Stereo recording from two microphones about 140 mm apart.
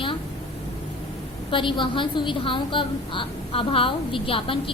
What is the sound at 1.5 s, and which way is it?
A woman's voice, 35° left (ahead or behind).